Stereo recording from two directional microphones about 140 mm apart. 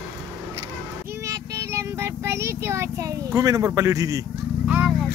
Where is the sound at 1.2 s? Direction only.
20° right (ahead or behind).